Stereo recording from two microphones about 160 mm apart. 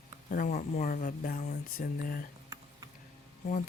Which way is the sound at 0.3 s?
60° left (ahead or behind).